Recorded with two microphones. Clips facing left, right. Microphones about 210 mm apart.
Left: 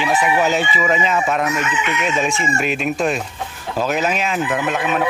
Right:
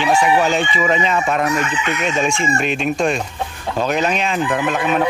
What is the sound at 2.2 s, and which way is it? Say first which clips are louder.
Speech: right 1 dB; 5° left (ahead or behind).